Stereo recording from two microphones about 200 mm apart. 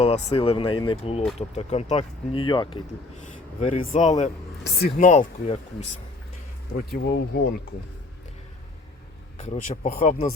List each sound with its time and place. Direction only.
0.0 s speech: 30° left (ahead or behind)
3.2 s speech: 35° left (ahead or behind)
4.8 s speech: 50° left (ahead or behind)
5.0 s speech: 35° left (ahead or behind)
6.7 s speech: 55° left (ahead or behind)
9.4 s speech: 40° left (ahead or behind)